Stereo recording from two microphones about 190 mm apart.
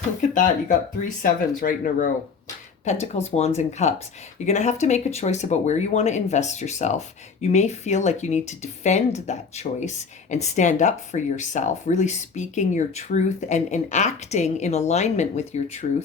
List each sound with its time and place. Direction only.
0.2 s speech: 45° left (ahead or behind)